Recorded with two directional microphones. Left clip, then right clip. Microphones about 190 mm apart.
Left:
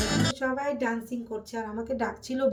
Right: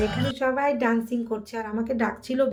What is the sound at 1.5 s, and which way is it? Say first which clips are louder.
Speech: right 2 dB; 15° right (ahead or behind).